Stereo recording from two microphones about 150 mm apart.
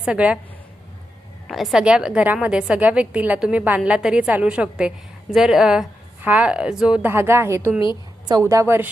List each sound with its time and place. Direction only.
0.0 s a woman's voice: 5° right (ahead or behind)
1.5 s a woman's voice: centre (ahead or behind); by 8.9 s 15° right (ahead or behind)